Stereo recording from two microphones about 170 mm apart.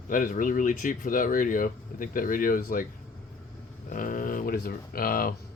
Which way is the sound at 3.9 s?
50° left (ahead or behind).